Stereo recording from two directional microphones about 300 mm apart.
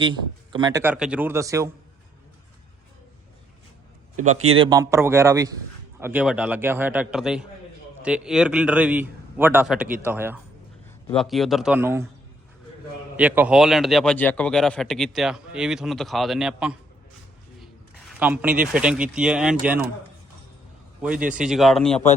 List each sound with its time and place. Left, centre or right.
0.0 s a man's voice: centre
4.3 s speech: right
4.5 s a man's voice: centre
13.1 s a man's voice: centre
18.2 s a man's voice: centre
21.2 s a man's voice: centre